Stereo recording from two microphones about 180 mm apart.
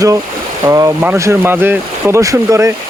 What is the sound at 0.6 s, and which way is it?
Speech, 20° right (ahead or behind).